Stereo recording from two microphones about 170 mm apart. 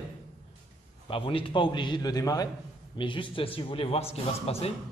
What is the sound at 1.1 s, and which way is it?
A man's voice, 30° left (ahead or behind).